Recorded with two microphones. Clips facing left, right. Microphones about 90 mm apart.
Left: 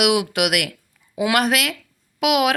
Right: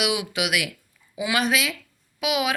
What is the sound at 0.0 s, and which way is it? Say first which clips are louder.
Speech: left 7 dB; 60° left (ahead or behind).